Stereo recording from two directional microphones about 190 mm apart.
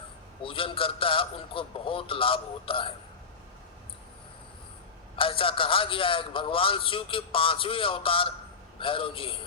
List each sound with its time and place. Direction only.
0.4 s a man's voice: 30° left (ahead or behind)
5.1 s a man's voice: 30° left (ahead or behind)